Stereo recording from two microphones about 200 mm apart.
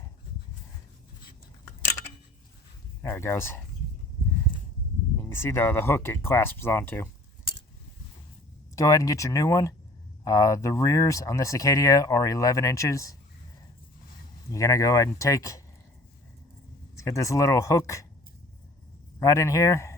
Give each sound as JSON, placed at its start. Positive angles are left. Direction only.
{"t": 3.0, "sound": "speech", "side_deg": 10}
{"t": 5.1, "sound": "speech", "side_deg": 10}
{"t": 8.7, "sound": "speech", "side_deg": 15}
{"t": 14.5, "sound": "speech", "side_deg": 15}
{"t": 17.0, "sound": "speech", "side_deg": 15}
{"t": 19.2, "sound": "speech", "side_deg": 15}